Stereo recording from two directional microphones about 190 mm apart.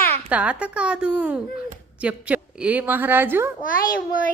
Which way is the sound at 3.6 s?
50° left (ahead or behind).